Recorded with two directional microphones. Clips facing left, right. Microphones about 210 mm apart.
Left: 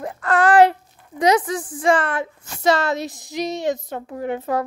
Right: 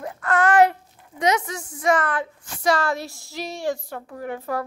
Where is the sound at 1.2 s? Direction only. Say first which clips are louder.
Left 5 dB; 35° left (ahead or behind).